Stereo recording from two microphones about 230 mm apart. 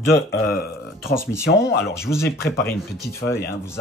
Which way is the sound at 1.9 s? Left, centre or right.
Centre.